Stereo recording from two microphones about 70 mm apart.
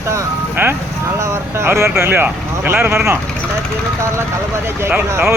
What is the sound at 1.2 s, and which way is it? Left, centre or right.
Speech, right.